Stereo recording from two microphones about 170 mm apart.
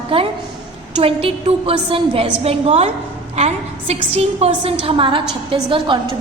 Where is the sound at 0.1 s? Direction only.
35° right (ahead or behind).